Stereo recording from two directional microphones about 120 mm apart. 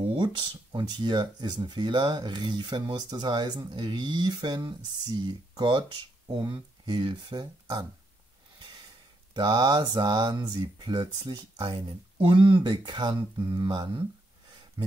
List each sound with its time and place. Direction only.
0.1 s speech: 40° right (ahead or behind)
9.3 s speech: 30° right (ahead or behind)